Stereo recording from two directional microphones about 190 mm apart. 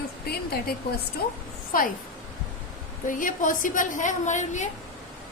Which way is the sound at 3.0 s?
45° left (ahead or behind).